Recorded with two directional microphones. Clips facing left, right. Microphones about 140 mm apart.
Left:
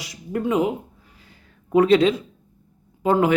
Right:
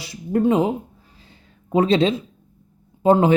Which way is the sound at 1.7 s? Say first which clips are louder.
Left 2 dB; 25° right (ahead or behind).